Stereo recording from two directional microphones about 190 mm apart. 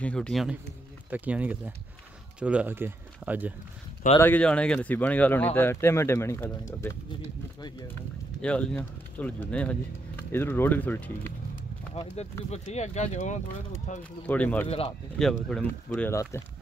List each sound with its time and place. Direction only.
0.0 s speech: 5° left (ahead or behind)
4.2 s speech: 10° left (ahead or behind)
8.4 s speech: 5° left (ahead or behind)
11.9 s speech: 35° left (ahead or behind)
14.2 s speech: 5° left (ahead or behind)